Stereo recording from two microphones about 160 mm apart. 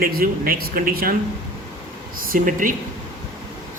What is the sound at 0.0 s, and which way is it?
A man's voice, 65° right (ahead or behind).